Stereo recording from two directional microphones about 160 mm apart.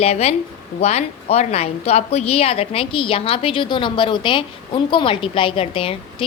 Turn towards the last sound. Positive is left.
turn(degrees=35)  # may be behind; listen again after turning